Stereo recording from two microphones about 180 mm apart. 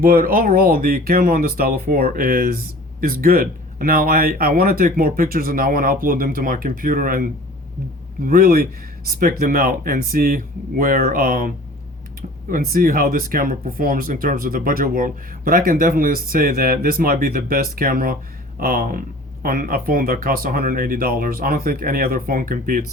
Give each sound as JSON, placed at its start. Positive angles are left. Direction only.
{"t": 0.0, "sound": "speech", "side_deg": -55}
{"t": 12.7, "sound": "speech", "side_deg": -50}